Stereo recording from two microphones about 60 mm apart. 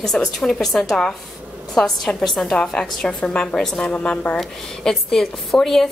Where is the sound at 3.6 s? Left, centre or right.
Centre.